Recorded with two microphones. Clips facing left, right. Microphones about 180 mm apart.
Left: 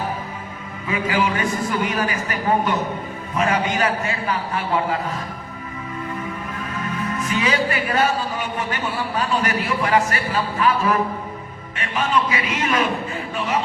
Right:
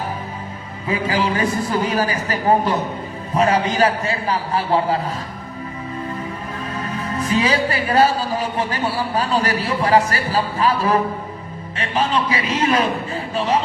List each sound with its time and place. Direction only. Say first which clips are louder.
0.9 s speech: right 1 dB; 35° right (ahead or behind)
6.7 s speech: even; 35° right (ahead or behind)